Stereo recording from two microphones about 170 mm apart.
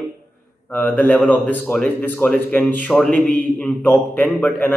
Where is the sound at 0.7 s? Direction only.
10° left (ahead or behind).